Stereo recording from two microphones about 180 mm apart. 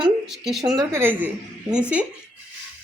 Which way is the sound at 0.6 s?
15° right (ahead or behind).